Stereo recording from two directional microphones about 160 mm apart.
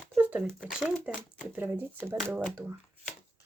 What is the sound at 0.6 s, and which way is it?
Speech, 5° right (ahead or behind).